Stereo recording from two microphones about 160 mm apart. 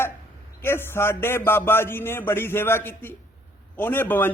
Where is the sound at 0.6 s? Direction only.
15° left (ahead or behind).